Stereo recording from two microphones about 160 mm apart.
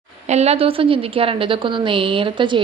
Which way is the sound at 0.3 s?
40° right (ahead or behind).